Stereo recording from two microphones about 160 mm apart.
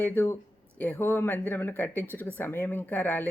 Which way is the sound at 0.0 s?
15° left (ahead or behind).